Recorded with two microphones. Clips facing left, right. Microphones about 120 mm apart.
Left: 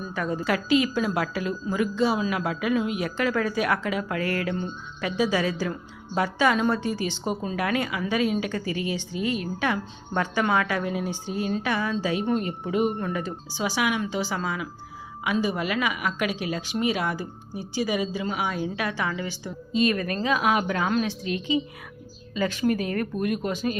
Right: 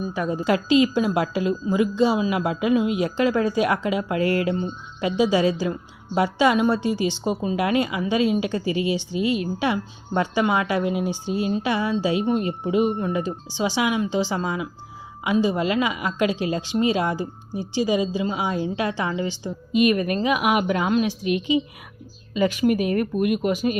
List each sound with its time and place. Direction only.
0.0 s a woman's voice: 15° right (ahead or behind)